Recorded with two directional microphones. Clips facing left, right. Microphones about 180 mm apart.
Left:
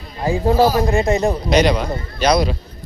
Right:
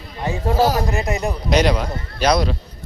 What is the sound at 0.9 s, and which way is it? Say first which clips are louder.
Speech: left 6 dB; 30° left (ahead or behind).